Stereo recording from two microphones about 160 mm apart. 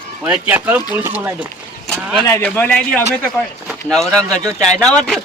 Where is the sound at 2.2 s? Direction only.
15° left (ahead or behind).